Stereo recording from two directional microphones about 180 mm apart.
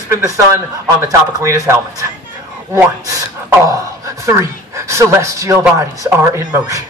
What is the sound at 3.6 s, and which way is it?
A man's voice, 20° right (ahead or behind).